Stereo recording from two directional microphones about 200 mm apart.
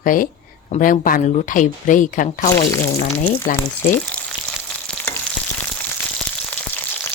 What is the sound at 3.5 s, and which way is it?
Frying, 40° left (ahead or behind).